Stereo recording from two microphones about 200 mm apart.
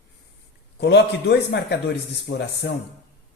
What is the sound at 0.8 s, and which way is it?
Speech, 55° left (ahead or behind).